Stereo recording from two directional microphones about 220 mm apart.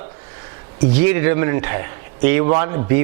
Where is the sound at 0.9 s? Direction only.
10° right (ahead or behind).